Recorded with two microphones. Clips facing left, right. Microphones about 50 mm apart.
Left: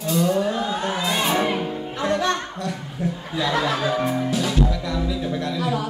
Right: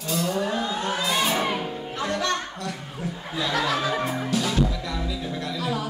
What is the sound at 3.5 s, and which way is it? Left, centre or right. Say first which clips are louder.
Speech: left 1 dB; centre.